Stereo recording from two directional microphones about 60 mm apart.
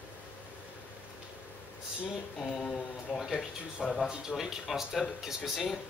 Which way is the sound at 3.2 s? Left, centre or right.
Centre.